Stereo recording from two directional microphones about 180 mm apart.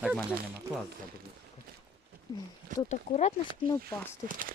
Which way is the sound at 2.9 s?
40° left (ahead or behind).